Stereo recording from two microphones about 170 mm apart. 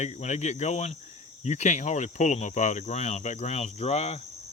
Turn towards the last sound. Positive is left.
turn(degrees=40)  # may be behind; listen again after turning